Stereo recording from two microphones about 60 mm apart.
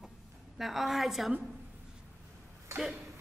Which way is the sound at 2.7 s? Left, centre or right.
Centre.